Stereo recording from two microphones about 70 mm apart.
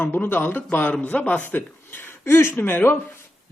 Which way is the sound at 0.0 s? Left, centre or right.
Left.